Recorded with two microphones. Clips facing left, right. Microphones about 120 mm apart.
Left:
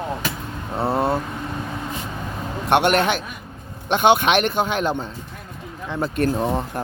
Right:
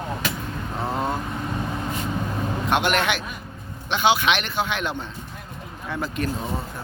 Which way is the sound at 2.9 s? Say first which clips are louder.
Left 4 dB; 40° left (ahead or behind).